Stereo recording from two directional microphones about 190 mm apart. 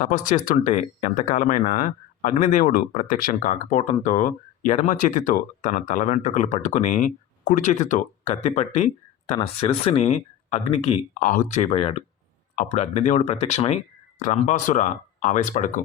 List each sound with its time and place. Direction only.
0.0 s speech: 45° left (ahead or behind)